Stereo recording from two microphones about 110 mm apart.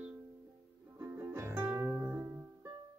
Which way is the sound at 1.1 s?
20° right (ahead or behind).